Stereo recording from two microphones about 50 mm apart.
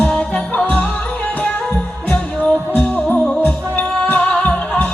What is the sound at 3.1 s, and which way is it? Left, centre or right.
Music, centre.